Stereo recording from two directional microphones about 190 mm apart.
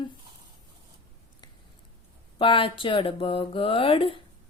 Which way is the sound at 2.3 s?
25° left (ahead or behind).